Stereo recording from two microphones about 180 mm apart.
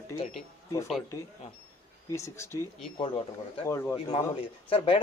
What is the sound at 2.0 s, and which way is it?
Speech, 15° left (ahead or behind).